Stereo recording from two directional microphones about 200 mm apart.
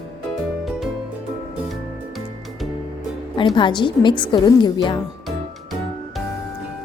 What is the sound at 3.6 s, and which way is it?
A woman's voice, 25° left (ahead or behind).